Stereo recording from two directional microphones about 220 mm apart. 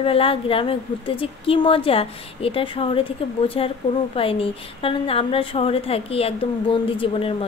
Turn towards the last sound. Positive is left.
turn(degrees=25)  # may be behind; listen again after turning